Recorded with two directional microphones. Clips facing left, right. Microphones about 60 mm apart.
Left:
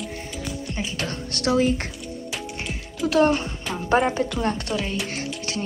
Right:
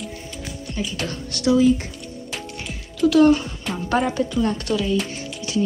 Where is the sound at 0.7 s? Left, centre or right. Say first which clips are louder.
Right 6 dB; left.